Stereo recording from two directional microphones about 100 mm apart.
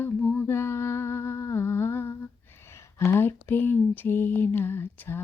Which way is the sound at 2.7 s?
25° left (ahead or behind).